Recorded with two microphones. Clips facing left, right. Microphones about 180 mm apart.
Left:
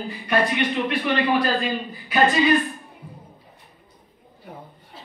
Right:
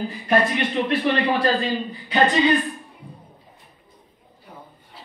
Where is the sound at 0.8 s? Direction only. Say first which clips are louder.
Right 1 dB; 30° right (ahead or behind).